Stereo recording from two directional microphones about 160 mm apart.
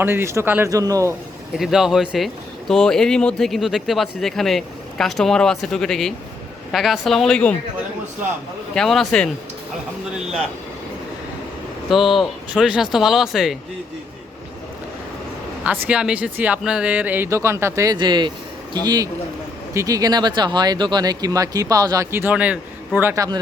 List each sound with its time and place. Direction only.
0.0 s speech: 15° right (ahead or behind)
1.5 s speech: centre (ahead or behind)
8.7 s speech: 5° left (ahead or behind)
11.9 s speech: centre (ahead or behind)
15.6 s speech: 10° right (ahead or behind)
17.9 s speech: 30° right (ahead or behind)